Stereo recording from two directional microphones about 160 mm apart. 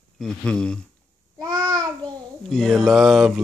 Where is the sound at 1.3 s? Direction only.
25° right (ahead or behind).